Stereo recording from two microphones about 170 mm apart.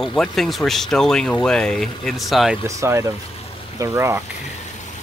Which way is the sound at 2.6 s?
15° right (ahead or behind).